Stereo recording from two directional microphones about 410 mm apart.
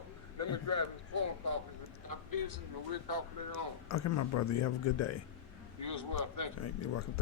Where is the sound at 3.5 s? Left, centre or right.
Left.